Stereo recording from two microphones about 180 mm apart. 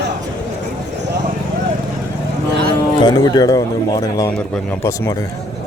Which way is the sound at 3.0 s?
25° left (ahead or behind).